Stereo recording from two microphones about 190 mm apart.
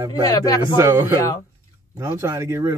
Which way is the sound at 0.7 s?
15° right (ahead or behind).